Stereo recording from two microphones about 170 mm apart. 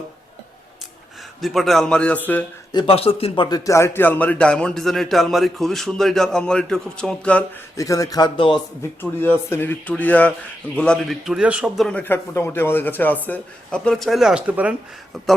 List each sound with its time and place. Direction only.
1.4 s a man's voice: centre (ahead or behind)
2.7 s speech: 35° left (ahead or behind)
3.7 s a man's voice: 15° left (ahead or behind)
7.8 s speech: 20° left (ahead or behind)
9.0 s a man's voice: 10° left (ahead or behind); by 14.8 s 10° right (ahead or behind)